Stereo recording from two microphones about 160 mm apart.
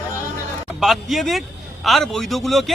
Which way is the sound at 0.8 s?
Centre (ahead or behind).